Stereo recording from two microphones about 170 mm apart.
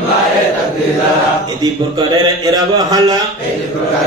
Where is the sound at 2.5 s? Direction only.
25° right (ahead or behind).